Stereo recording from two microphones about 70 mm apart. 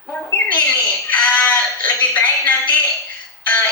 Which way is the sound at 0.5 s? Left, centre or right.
Left.